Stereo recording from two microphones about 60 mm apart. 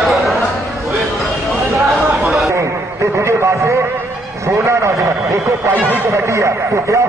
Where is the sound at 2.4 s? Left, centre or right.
Right.